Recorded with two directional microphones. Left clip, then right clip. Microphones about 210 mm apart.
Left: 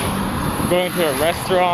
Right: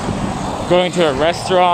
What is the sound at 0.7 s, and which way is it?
Speech, 25° right (ahead or behind).